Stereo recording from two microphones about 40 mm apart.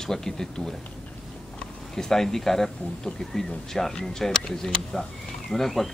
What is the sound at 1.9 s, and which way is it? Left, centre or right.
Speech, centre.